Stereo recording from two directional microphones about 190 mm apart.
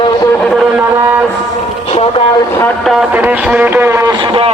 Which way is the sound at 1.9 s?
30° left (ahead or behind).